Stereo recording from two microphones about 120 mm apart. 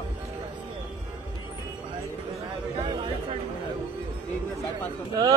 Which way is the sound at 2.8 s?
40° right (ahead or behind).